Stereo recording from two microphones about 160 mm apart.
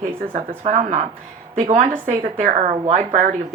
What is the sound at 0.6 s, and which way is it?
A woman's voice, 50° right (ahead or behind).